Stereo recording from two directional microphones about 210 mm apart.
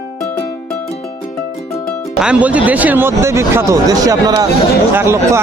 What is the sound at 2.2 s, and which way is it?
Speech, 5° right (ahead or behind).